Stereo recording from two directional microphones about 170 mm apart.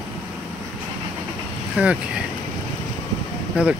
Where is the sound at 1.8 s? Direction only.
10° right (ahead or behind).